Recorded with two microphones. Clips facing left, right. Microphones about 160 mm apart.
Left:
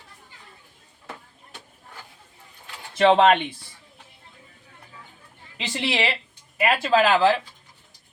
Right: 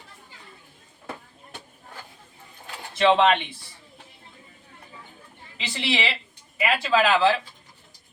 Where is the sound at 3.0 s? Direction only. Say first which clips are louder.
Left 2 dB; 50° left (ahead or behind).